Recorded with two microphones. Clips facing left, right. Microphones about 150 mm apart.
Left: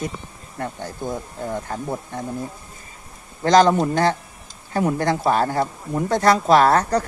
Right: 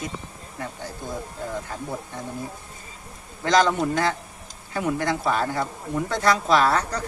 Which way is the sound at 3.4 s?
40° left (ahead or behind).